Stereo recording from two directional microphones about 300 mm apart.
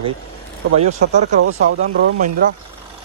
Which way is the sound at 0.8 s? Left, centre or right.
Right.